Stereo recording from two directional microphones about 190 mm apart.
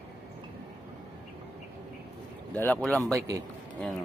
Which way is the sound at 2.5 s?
5° left (ahead or behind).